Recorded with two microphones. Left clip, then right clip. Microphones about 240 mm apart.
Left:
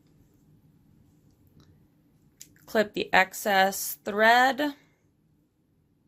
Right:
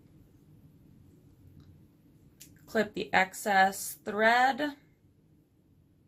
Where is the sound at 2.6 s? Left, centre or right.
Left.